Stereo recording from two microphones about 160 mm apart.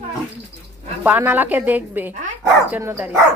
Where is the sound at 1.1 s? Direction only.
10° right (ahead or behind).